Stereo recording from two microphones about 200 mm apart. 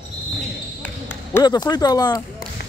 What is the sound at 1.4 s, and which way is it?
Speech, 20° left (ahead or behind).